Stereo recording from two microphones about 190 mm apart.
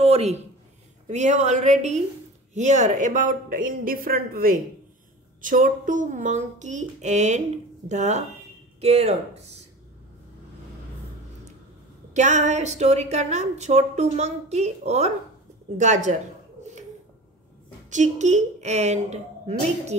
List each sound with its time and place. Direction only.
0.0 s a sound: 35° right (ahead or behind)
1.0 s a woman's voice: 40° right (ahead or behind)
12.1 s a woman's voice: 40° right (ahead or behind)
17.8 s a woman's voice: 40° right (ahead or behind)